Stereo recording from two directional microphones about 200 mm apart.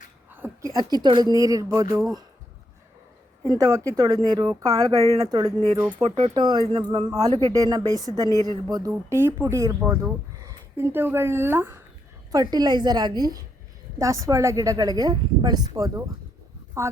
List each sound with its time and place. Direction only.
0.3 s speech: 10° right (ahead or behind)
3.5 s speech: 15° right (ahead or behind)
6.0 s speech: 30° right (ahead or behind); by 16.9 s 15° right (ahead or behind)